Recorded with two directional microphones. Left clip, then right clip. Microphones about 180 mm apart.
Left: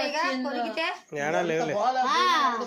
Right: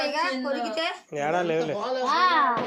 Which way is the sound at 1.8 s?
45° left (ahead or behind).